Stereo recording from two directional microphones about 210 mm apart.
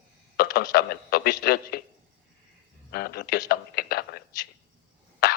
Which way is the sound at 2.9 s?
45° left (ahead or behind).